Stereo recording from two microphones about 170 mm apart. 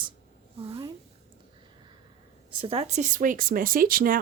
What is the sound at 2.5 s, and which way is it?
Speech, 30° right (ahead or behind).